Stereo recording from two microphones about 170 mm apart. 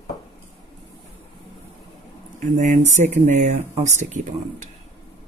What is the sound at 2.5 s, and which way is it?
Speech, 45° right (ahead or behind).